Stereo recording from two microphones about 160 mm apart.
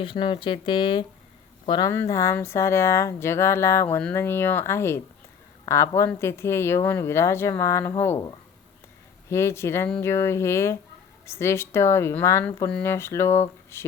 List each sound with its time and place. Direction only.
0.0 s speech: 30° left (ahead or behind)
1.9 s speech: 15° left (ahead or behind)
9.3 s speech: 15° left (ahead or behind)